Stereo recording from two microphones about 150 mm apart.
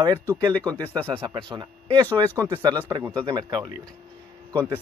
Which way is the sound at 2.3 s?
20° right (ahead or behind).